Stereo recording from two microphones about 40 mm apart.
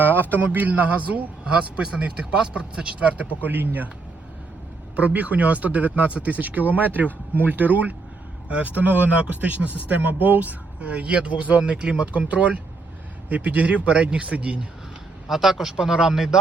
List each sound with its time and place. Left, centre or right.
0.5 s speech: right
1.7 s speech: right
3.4 s speech: right
4.9 s speech: right
15.3 s speech: centre
15.7 s speech: centre